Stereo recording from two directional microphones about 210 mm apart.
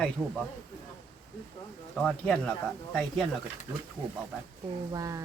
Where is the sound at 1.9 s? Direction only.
5° left (ahead or behind).